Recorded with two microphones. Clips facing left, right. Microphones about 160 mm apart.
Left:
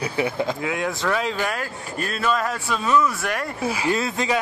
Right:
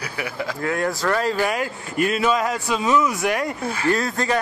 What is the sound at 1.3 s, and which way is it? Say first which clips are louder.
Speech: right 4 dB; 10° right (ahead or behind).